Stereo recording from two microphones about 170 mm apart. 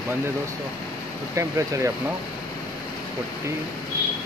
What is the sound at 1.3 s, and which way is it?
Speech, 20° right (ahead or behind).